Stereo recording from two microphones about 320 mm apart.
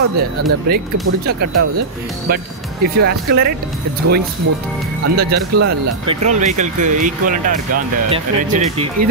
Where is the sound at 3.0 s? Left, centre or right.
Right.